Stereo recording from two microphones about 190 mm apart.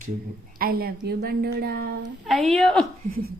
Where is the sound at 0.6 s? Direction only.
50° right (ahead or behind).